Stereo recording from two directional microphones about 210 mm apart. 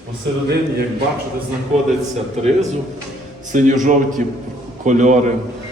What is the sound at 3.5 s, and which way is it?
A man's voice, 35° right (ahead or behind).